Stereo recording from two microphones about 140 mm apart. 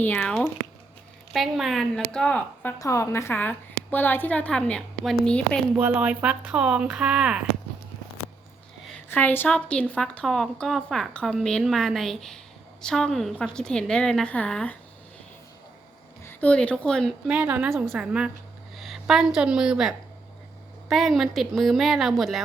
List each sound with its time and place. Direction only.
0.0 s a woman's voice: 15° left (ahead or behind)
1.3 s a woman's voice: centre (ahead or behind)
2.7 s a woman's voice: 25° left (ahead or behind); by 5.1 s 5° left (ahead or behind)
5.7 s speech: 10° right (ahead or behind)
9.0 s a woman's voice: 15° left (ahead or behind)
16.2 s speech: 10° left (ahead or behind)
17.2 s a woman's voice: 10° right (ahead or behind)